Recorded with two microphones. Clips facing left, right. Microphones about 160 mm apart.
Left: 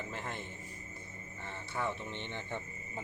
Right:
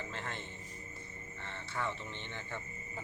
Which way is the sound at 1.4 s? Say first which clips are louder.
Left 2 dB; 10° left (ahead or behind).